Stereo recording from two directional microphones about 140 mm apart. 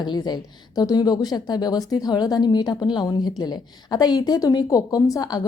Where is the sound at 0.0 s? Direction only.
30° left (ahead or behind).